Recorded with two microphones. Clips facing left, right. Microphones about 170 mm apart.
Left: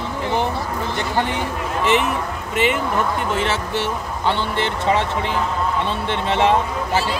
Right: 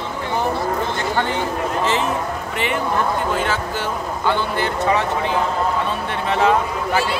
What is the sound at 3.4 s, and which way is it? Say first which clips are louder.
Speech: left 1 dB; 25° left (ahead or behind).